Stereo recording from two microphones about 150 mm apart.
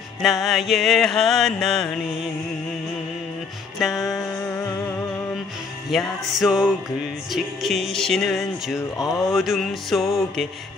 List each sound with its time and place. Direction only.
0.2 s music: centre (ahead or behind)
3.8 s music: centre (ahead or behind)
4.2 s music: 15° left (ahead or behind)
5.9 s music: centre (ahead or behind)
8.9 s speech: 25° left (ahead or behind)
9.3 s music: centre (ahead or behind)